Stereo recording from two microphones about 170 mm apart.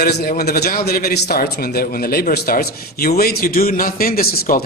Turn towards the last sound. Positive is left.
turn(degrees=60)  # may be behind; listen again after turning